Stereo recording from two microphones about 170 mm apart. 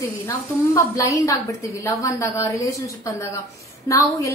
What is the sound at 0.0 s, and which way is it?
A woman's voice, 20° left (ahead or behind).